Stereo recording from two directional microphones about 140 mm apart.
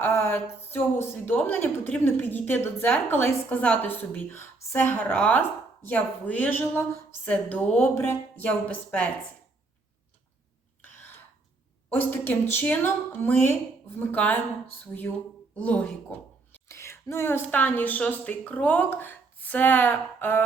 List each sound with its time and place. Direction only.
0.0 s a woman's voice: 15° left (ahead or behind)
11.9 s a woman's voice: 15° left (ahead or behind)
15.5 s a woman's voice: 10° left (ahead or behind)